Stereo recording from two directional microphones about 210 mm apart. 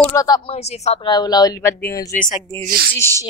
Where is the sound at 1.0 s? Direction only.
20° left (ahead or behind).